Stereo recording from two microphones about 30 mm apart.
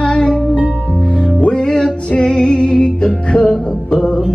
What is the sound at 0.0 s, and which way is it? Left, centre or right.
Music, left.